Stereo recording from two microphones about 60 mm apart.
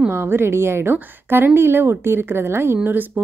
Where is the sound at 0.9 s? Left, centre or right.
Right.